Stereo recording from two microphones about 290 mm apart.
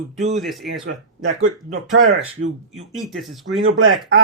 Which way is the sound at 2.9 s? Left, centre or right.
Centre.